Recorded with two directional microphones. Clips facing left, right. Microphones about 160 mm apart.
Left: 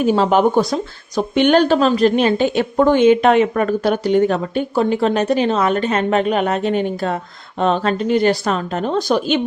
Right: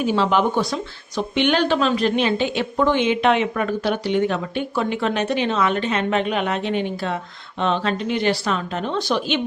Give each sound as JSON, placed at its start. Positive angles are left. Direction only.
{"t": 0.0, "sound": "speech", "side_deg": 45}